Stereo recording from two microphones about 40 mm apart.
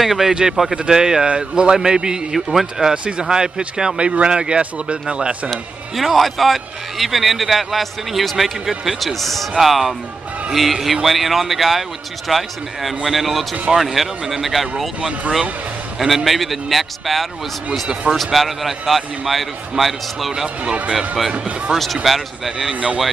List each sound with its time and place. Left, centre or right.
0.0 s a man's voice: centre
0.3 s a man's voice: centre
4.0 s speech: right
5.5 s a man's voice: centre
16.3 s a man's voice: centre
21.3 s speech: right
22.0 s a man's voice: centre